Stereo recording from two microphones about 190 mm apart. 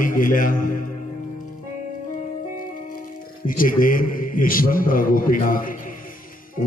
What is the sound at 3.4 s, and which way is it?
A man's voice, 45° left (ahead or behind).